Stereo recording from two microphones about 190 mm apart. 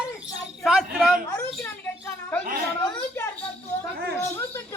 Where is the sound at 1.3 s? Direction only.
15° left (ahead or behind).